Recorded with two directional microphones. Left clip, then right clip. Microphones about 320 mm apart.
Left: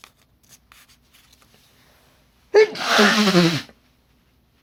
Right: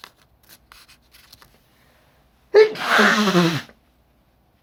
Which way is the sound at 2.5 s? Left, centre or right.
Left.